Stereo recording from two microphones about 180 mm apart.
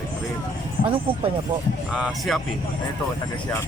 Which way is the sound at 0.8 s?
30° right (ahead or behind).